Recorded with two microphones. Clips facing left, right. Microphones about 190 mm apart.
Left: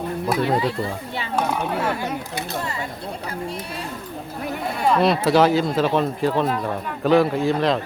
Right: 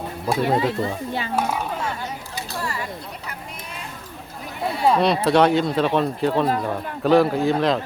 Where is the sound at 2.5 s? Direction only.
20° left (ahead or behind).